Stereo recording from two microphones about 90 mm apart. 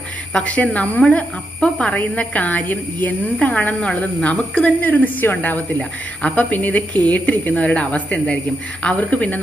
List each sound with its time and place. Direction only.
0.3 s speech: 15° left (ahead or behind)